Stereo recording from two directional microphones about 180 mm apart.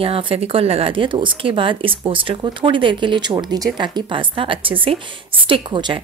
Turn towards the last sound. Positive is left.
turn(degrees=-25)  # may be behind; listen again after turning